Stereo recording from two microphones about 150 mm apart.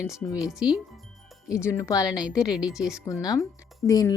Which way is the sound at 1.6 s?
20° left (ahead or behind).